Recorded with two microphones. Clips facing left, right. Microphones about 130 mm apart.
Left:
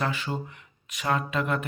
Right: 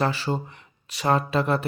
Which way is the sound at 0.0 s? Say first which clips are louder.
Right 5 dB; 35° right (ahead or behind).